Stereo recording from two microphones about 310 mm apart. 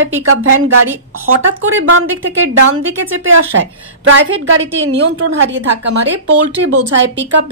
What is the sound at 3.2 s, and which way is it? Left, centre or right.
A woman's voice, right.